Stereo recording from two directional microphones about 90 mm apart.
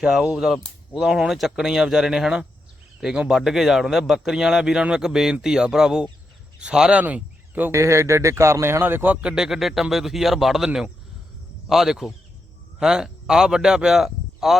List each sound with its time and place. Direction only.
0.0 s a man's voice: 10° right (ahead or behind)
7.0 s speech: 20° right (ahead or behind)
7.7 s speech: 30° right (ahead or behind)
9.2 s speech: 5° right (ahead or behind)